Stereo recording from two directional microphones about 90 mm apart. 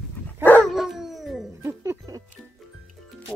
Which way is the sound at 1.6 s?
30° right (ahead or behind).